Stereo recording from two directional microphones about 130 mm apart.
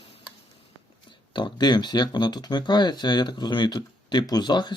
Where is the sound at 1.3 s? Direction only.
35° left (ahead or behind).